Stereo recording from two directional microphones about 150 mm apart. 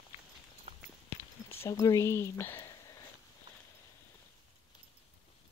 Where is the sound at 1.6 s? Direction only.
20° left (ahead or behind).